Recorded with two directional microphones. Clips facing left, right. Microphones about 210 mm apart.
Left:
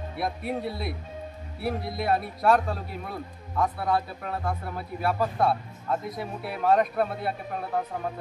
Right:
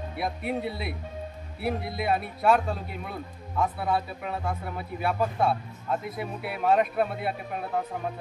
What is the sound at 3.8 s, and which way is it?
Speech, centre (ahead or behind).